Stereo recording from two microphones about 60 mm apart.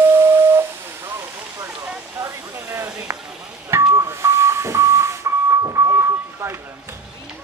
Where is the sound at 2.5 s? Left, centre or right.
Right.